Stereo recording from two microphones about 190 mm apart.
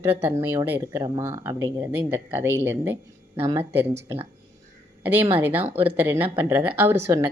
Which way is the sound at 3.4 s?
30° right (ahead or behind).